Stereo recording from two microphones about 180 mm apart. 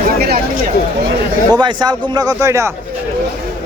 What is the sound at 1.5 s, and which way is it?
A man's voice, 25° right (ahead or behind).